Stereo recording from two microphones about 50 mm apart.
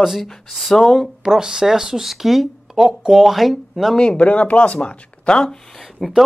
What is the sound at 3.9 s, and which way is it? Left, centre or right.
Speech, left.